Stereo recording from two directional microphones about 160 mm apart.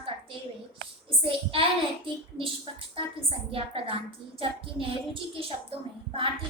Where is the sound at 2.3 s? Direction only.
35° right (ahead or behind).